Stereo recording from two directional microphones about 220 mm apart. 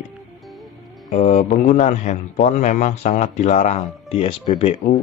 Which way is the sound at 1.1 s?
35° left (ahead or behind).